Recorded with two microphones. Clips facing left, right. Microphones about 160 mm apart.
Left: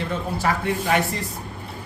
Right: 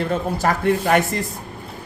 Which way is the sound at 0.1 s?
45° right (ahead or behind).